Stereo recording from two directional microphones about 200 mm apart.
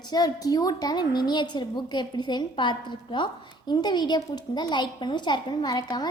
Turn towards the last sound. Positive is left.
turn(degrees=20)  # may be behind; listen again after turning